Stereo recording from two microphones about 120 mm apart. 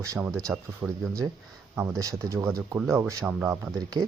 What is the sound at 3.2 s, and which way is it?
Speech, 10° right (ahead or behind).